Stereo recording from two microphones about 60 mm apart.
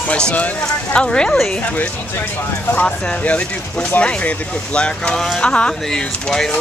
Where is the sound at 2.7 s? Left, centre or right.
Left.